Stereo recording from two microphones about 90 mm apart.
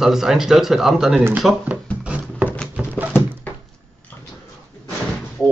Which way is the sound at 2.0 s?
10° right (ahead or behind).